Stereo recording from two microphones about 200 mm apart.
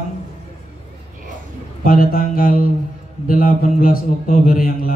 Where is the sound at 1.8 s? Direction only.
45° left (ahead or behind).